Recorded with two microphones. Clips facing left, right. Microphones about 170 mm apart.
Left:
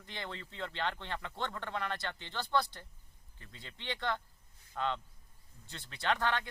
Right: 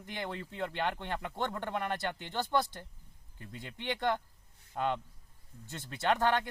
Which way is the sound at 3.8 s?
50° right (ahead or behind).